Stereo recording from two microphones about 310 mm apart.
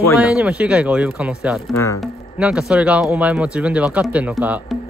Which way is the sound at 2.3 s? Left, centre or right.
Centre.